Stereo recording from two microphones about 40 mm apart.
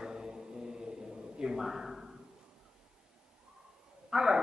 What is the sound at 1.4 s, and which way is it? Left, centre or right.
Speech, centre.